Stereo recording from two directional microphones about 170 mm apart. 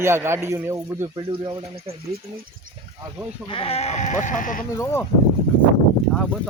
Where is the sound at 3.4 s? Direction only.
30° left (ahead or behind); by 4.6 s 50° left (ahead or behind).